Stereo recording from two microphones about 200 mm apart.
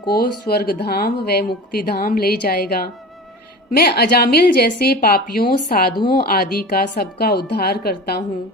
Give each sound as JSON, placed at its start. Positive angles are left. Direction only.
{"t": 0.1, "sound": "speech", "side_deg": 50}